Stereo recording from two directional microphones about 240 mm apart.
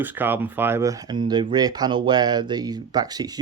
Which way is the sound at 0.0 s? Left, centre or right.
Centre.